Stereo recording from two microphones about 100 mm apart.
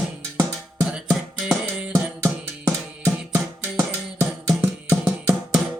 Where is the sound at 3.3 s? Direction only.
30° right (ahead or behind).